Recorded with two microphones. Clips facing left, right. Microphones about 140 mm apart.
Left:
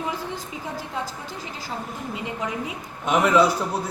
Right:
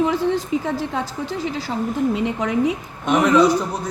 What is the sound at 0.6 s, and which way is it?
A woman's voice, 90° right.